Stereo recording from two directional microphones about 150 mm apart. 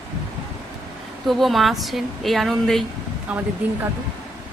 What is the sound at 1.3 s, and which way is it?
A woman's voice, centre (ahead or behind).